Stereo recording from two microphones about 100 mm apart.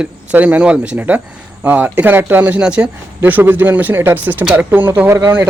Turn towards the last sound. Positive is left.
turn(degrees=-25)  # may be behind; listen again after turning